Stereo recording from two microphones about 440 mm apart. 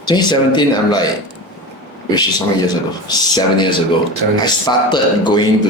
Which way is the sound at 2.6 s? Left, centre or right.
Centre.